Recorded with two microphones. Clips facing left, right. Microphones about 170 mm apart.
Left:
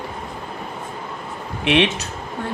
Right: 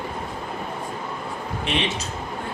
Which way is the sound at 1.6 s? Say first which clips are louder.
Left 8 dB; 70° left (ahead or behind).